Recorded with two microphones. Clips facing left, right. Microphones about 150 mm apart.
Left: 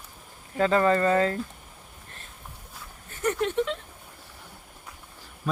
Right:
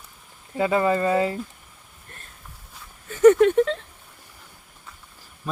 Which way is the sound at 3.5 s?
45° right (ahead or behind).